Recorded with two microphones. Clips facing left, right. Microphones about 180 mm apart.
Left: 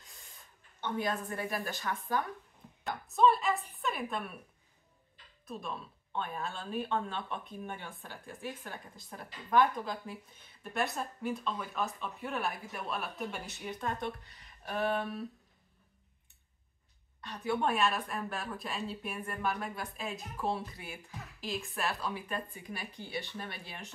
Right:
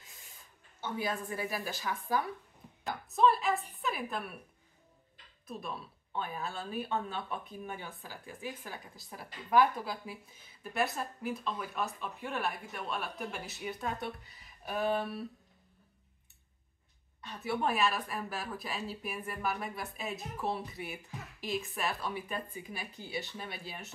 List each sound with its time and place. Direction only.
0.7 s a woman's voice: 5° right (ahead or behind)
5.5 s speech: 5° right (ahead or behind)
17.3 s speech: 5° right (ahead or behind)
23.0 s speech: 55° left (ahead or behind)
23.3 s speech: 10° right (ahead or behind)